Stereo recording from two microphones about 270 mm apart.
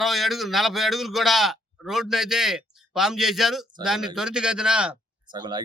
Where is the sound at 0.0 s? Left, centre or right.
Centre.